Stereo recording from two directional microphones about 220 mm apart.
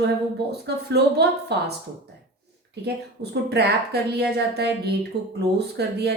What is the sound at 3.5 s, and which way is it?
A woman's voice, 50° right (ahead or behind).